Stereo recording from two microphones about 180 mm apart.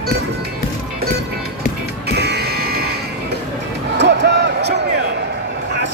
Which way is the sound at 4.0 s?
70° right (ahead or behind).